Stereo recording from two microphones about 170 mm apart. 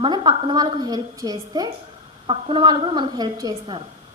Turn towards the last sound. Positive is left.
turn(degrees=-25)  # may be behind; listen again after turning